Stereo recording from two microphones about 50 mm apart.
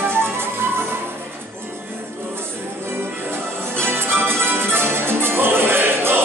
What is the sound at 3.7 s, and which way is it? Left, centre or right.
Music, right.